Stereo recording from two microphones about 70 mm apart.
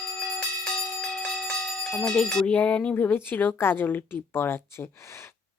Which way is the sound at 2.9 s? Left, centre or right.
Left.